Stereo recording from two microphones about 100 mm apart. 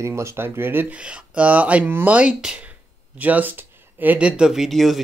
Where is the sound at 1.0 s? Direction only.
10° right (ahead or behind).